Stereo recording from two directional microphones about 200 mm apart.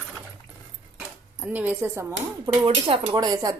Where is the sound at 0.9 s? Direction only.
10° right (ahead or behind).